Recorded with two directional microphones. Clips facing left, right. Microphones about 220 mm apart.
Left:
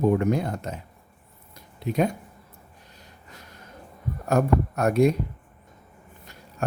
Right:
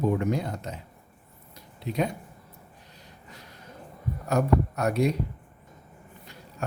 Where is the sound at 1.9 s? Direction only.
50° left (ahead or behind).